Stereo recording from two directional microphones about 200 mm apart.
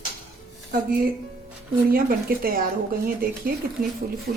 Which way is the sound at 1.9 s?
45° right (ahead or behind).